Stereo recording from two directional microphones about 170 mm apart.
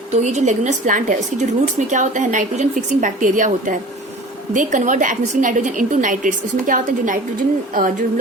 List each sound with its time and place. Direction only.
0.2 s a woman's voice: 45° right (ahead or behind)